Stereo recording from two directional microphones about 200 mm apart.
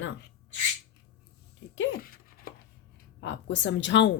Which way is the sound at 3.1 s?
65° left (ahead or behind).